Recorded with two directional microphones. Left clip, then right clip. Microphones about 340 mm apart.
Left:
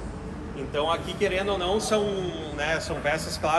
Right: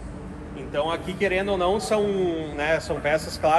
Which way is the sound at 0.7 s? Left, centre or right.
Right.